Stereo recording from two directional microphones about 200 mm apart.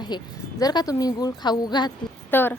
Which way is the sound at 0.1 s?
20° left (ahead or behind).